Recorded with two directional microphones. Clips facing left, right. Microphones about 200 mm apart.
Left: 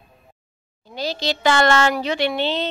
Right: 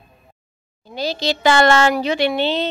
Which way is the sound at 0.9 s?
10° right (ahead or behind).